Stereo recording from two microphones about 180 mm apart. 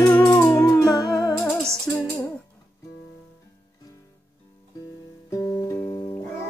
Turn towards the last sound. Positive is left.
turn(degrees=20)  # may be behind; listen again after turning